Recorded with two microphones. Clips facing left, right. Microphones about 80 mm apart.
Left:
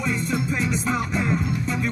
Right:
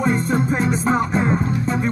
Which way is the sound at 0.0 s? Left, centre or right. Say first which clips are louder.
Right 6 dB; right.